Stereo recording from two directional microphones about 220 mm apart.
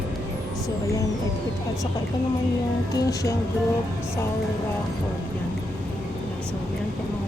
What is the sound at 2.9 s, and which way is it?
Speech, 15° left (ahead or behind).